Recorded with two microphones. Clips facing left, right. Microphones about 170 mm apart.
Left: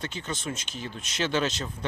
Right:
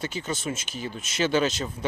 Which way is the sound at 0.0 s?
5° right (ahead or behind).